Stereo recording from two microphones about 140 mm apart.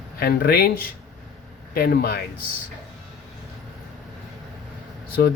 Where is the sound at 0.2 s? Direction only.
90° left.